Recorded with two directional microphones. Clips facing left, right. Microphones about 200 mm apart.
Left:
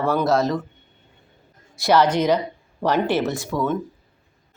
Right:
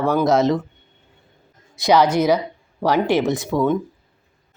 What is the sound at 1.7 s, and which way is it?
Speech, 15° right (ahead or behind).